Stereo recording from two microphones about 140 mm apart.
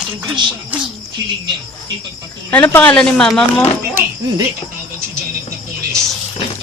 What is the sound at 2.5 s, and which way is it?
Speech, 15° left (ahead or behind).